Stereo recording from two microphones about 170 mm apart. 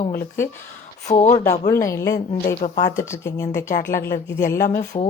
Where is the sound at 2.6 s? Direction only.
50° left (ahead or behind).